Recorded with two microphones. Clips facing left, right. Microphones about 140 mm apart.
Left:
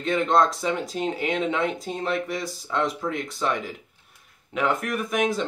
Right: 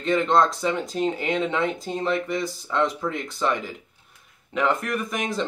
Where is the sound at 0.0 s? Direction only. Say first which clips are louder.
Right 1 dB; centre (ahead or behind).